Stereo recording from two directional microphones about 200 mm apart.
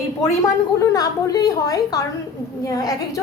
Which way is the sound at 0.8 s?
20° left (ahead or behind).